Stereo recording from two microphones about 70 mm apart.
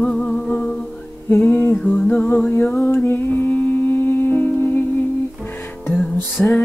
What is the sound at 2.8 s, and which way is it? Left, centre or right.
Music, left.